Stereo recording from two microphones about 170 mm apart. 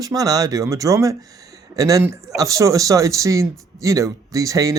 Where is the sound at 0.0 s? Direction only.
20° right (ahead or behind).